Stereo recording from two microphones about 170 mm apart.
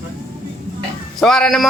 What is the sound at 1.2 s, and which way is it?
Speech, 5° left (ahead or behind).